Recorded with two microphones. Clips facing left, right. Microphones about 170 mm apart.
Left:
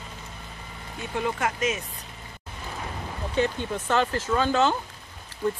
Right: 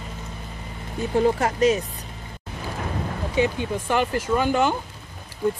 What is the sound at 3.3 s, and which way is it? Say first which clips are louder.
Speech: right 3 dB; 10° right (ahead or behind).